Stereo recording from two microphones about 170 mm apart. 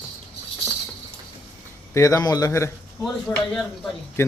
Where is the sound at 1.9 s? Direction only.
20° left (ahead or behind).